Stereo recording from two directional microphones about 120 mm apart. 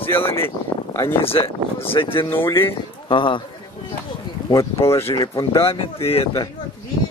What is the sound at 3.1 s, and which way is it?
Speech, 45° left (ahead or behind).